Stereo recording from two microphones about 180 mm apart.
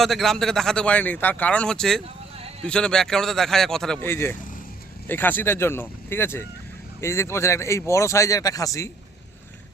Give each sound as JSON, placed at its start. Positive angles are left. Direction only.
{"t": 0.0, "sound": "a man's voice", "side_deg": 0}